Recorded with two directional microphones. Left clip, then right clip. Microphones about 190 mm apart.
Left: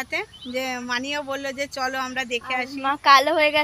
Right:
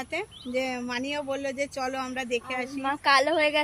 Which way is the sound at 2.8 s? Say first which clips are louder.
Left 6 dB; 25° left (ahead or behind).